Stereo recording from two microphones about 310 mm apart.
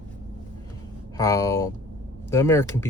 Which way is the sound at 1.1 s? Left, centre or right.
Centre.